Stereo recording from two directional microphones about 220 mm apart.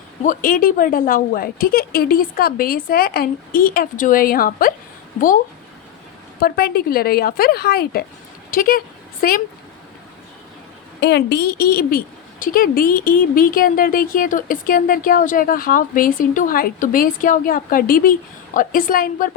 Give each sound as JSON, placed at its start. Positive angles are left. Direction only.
{"t": 0.2, "sound": "a woman's voice", "side_deg": 35}
{"t": 6.4, "sound": "a woman's voice", "side_deg": 45}
{"t": 11.0, "sound": "a woman's voice", "side_deg": 50}